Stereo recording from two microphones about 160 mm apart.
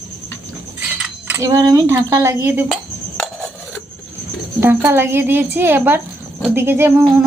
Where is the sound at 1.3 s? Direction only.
20° right (ahead or behind).